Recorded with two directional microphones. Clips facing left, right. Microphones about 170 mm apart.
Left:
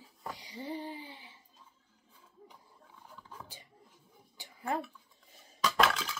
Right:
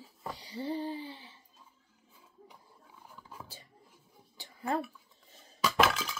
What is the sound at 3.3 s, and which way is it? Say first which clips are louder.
Dog: right 1 dB; 10° right (ahead or behind).